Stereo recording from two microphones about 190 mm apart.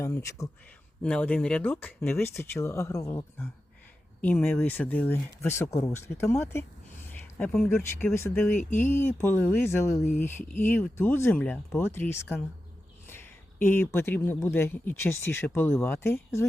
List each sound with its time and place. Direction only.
0.0 s speech: 15° left (ahead or behind)